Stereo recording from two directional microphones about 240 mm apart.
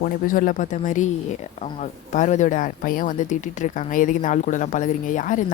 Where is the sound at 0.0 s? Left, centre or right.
Left.